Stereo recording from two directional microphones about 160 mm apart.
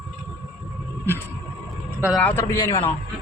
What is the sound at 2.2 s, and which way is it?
Speech, 10° left (ahead or behind).